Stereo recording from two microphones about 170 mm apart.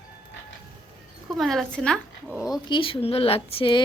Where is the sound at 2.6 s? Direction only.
30° left (ahead or behind).